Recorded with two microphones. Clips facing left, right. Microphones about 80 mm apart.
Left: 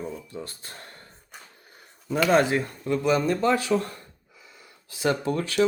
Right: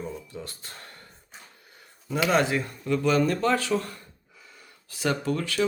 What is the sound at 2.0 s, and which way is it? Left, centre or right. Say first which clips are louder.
Speech: left 3 dB; left.